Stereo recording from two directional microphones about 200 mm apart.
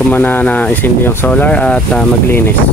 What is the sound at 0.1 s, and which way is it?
Speech, 10° left (ahead or behind).